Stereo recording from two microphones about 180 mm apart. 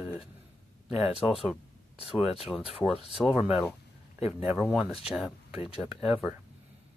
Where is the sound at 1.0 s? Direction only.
35° left (ahead or behind).